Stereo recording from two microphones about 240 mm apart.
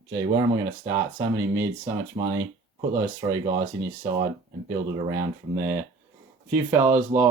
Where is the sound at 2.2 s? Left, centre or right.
Right.